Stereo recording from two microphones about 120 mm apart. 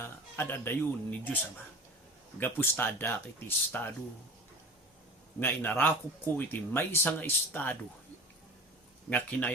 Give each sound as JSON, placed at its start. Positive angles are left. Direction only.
{"t": 0.0, "sound": "speech", "side_deg": 20}
{"t": 2.4, "sound": "speech", "side_deg": 15}
{"t": 5.4, "sound": "speech", "side_deg": 15}
{"t": 9.0, "sound": "speech", "side_deg": 15}